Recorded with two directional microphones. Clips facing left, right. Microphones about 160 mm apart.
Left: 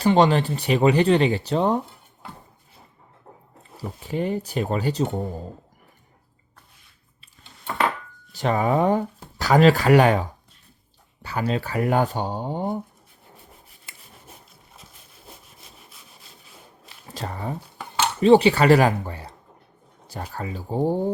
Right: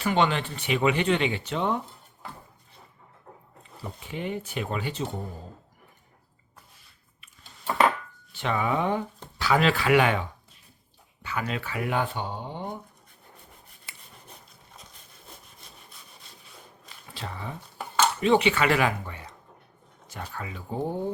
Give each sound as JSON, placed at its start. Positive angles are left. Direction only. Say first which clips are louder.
{"t": 0.0, "sound": "speech", "louder": "left 7 dB", "side_deg": 35}
{"t": 3.3, "sound": "a sound", "louder": "left 1 dB", "side_deg": 20}
{"t": 3.8, "sound": "speech", "louder": "left 8 dB", "side_deg": 40}
{"t": 8.3, "sound": "speech", "louder": "left 5 dB", "side_deg": 40}
{"t": 15.5, "sound": "sawing", "louder": "left 1 dB", "side_deg": 0}
{"t": 17.1, "sound": "speech", "louder": "left 6 dB", "side_deg": 45}